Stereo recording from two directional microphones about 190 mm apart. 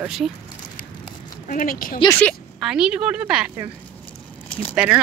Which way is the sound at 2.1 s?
5° left (ahead or behind).